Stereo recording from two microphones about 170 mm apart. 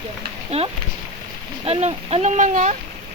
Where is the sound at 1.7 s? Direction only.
40° right (ahead or behind).